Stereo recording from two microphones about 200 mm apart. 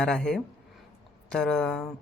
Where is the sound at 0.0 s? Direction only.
5° left (ahead or behind).